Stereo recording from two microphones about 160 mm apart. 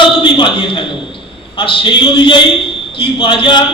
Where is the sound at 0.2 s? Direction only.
30° left (ahead or behind).